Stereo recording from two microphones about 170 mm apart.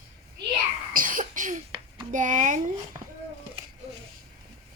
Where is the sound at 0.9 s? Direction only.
55° right (ahead or behind).